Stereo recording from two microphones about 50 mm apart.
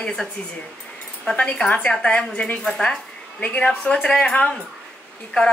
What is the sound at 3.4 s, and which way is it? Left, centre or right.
A woman's voice, left.